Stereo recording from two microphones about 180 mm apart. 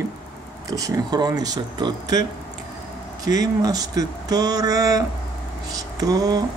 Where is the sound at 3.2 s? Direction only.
20° right (ahead or behind).